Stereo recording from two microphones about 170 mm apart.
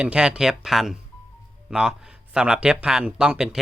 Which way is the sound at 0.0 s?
5° right (ahead or behind).